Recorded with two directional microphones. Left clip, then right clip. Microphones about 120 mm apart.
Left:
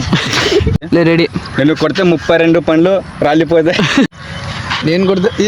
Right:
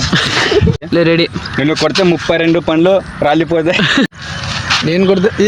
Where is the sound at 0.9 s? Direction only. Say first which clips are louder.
Left 2 dB; 30° left (ahead or behind).